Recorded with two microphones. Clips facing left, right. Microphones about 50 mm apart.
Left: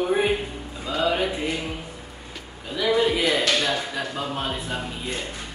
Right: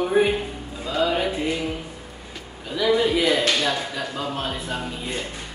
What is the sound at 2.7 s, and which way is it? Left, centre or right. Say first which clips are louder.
Speech: right 1 dB; centre.